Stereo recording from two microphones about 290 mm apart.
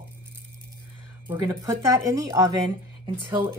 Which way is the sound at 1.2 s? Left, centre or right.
Centre.